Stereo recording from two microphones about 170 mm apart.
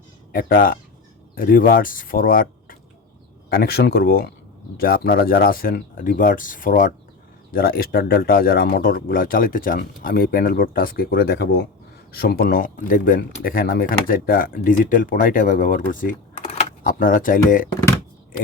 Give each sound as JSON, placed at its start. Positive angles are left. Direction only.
{"t": 0.3, "sound": "speech", "side_deg": 60}